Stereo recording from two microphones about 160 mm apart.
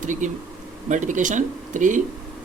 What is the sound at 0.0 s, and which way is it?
Speech, 50° right (ahead or behind).